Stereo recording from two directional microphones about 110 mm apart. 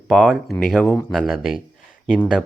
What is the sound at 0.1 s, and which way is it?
Speech, centre (ahead or behind).